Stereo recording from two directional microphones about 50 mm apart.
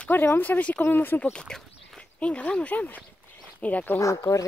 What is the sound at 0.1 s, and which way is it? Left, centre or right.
Speech, left.